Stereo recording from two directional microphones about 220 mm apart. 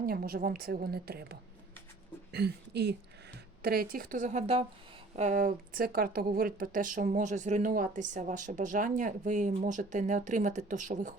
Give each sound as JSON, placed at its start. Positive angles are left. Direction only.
{"t": 0.0, "sound": "a woman's voice", "side_deg": -40}